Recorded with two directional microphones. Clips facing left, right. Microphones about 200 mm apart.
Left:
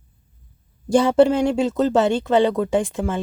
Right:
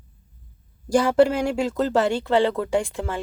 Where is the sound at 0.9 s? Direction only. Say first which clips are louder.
Left 3 dB; 25° left (ahead or behind).